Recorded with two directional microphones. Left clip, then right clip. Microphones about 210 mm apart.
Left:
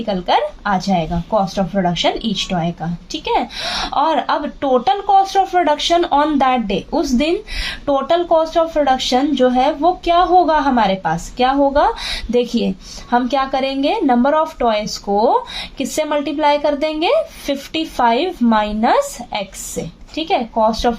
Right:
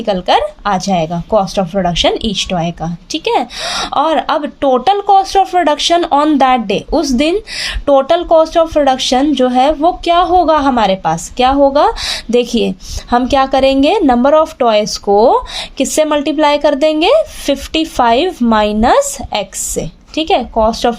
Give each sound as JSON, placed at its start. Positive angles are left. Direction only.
{"t": 0.0, "sound": "a woman's voice", "side_deg": -45}